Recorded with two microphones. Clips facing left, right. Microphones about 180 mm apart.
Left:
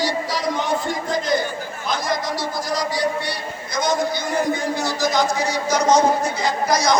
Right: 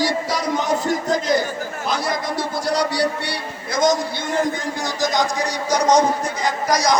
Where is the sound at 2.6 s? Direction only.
65° right (ahead or behind).